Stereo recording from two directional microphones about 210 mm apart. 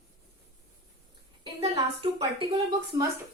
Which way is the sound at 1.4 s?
25° right (ahead or behind).